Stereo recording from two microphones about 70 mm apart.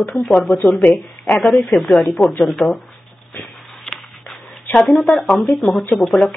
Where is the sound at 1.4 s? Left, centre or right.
Centre.